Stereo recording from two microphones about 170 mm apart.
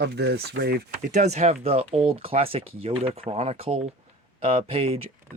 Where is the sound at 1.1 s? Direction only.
40° right (ahead or behind).